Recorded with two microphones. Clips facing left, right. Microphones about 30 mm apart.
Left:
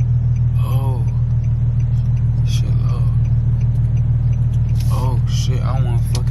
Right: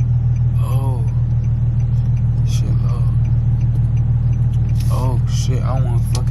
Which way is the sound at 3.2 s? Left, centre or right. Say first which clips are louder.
Even; right.